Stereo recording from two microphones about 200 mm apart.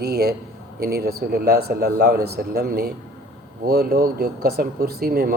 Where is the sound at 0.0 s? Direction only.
50° right (ahead or behind).